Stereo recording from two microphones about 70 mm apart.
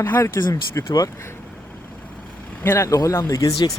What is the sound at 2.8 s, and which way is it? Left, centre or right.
Speech, left.